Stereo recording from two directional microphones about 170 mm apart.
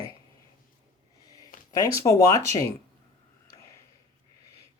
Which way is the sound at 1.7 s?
20° left (ahead or behind).